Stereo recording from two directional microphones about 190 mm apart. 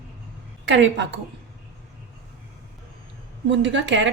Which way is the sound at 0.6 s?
70° right (ahead or behind).